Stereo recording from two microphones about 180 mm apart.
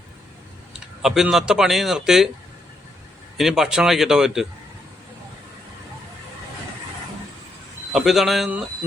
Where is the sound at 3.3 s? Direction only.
Centre (ahead or behind).